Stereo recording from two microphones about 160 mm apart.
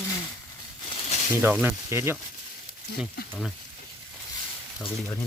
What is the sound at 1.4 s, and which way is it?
Speech, 15° right (ahead or behind).